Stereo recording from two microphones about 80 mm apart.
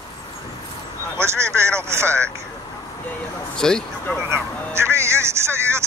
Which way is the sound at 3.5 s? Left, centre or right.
Centre.